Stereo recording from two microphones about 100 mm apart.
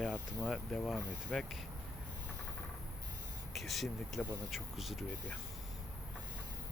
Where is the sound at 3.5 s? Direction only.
Centre (ahead or behind).